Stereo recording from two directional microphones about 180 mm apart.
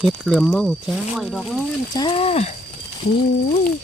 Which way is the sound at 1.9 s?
25° left (ahead or behind).